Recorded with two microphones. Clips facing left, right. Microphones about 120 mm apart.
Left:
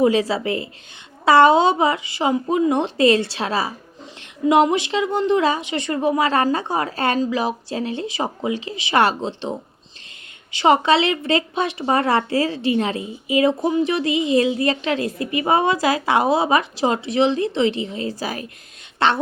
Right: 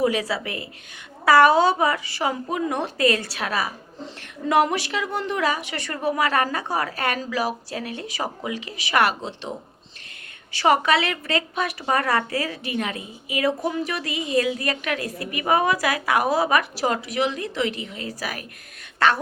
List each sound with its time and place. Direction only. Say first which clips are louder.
0.0 s a woman's voice: left 5 dB; 30° left (ahead or behind)